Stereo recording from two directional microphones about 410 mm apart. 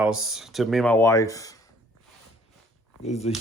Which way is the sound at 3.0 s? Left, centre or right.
Centre.